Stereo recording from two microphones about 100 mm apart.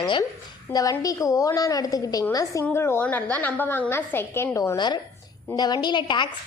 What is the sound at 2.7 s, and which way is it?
A woman's voice, 25° left (ahead or behind).